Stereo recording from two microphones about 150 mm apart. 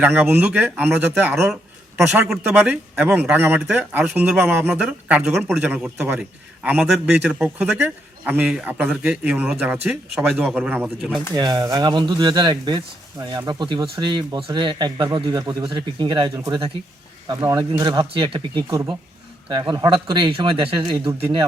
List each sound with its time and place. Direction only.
0.0 s a man's voice: 10° right (ahead or behind)
10.8 s speech: centre (ahead or behind)
11.3 s speech: 25° right (ahead or behind)